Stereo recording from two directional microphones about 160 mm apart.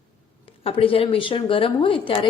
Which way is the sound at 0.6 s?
35° left (ahead or behind).